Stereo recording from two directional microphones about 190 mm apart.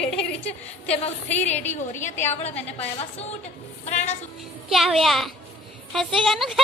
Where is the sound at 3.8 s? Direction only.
35° left (ahead or behind).